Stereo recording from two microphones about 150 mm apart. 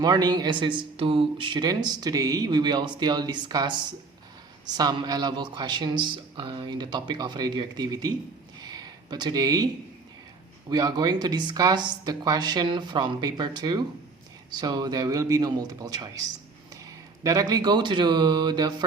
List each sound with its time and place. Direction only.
0.0 s speech: 25° right (ahead or behind)
4.8 s speech: 25° right (ahead or behind)
8.6 s a sound: 25° right (ahead or behind)
10.7 s speech: 25° right (ahead or behind)
17.2 s speech: 25° right (ahead or behind)